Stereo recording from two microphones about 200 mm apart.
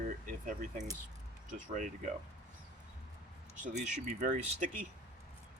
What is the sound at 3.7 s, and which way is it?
Speech, 35° right (ahead or behind).